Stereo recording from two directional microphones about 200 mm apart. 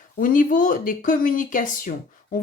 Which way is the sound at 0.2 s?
40° left (ahead or behind).